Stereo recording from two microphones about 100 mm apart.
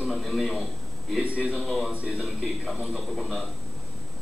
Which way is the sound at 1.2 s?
15° right (ahead or behind).